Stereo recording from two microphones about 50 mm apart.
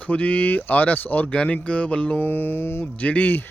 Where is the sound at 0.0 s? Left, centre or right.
Left.